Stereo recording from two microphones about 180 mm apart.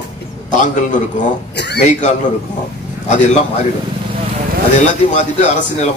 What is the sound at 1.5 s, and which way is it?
Speech, 70° left (ahead or behind).